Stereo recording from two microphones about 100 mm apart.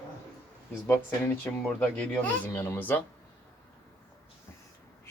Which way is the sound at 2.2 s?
20° left (ahead or behind).